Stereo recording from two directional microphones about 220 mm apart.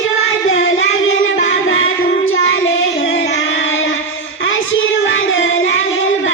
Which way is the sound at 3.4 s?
60° left (ahead or behind).